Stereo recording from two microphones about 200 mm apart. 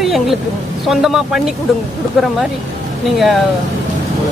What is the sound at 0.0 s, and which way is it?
Vehicle, centre (ahead or behind).